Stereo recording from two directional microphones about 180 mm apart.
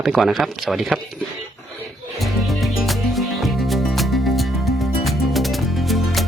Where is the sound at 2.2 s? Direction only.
Centre (ahead or behind).